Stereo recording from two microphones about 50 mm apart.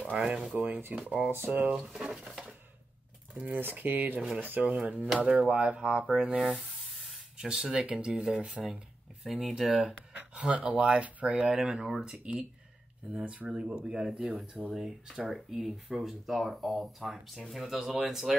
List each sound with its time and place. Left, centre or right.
0.1 s speech: right
0.9 s speech: right
1.3 s speech: right
2.0 s speech: centre
3.5 s speech: right
4.6 s speech: right
9.2 s speech: centre
10.1 s speech: right
13.2 s speech: right; by 18.3 s centre